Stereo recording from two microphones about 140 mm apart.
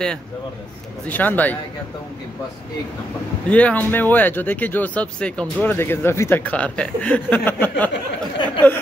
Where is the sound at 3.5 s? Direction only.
10° left (ahead or behind).